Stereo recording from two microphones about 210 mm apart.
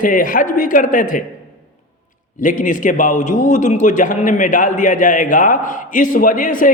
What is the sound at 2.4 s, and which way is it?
A man's voice, 40° left (ahead or behind).